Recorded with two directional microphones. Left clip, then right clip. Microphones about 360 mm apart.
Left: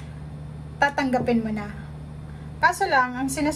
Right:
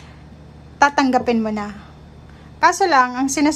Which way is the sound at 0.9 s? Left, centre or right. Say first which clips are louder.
Right 6 dB; centre.